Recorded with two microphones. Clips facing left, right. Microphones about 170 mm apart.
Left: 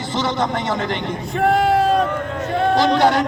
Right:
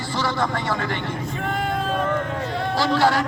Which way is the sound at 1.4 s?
80° left.